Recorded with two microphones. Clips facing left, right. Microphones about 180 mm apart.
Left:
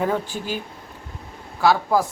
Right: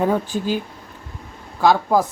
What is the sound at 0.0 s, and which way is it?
Speech, 15° right (ahead or behind).